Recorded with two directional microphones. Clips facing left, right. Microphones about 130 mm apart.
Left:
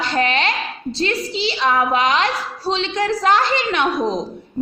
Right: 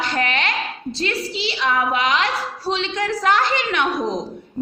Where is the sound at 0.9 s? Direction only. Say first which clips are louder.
Left 3 dB; 30° left (ahead or behind).